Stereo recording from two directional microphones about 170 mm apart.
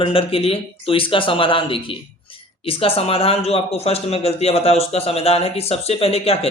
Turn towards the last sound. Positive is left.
turn(degrees=35)  # may be behind; listen again after turning